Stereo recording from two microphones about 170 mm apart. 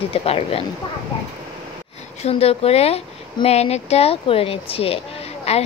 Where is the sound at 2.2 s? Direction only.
35° left (ahead or behind).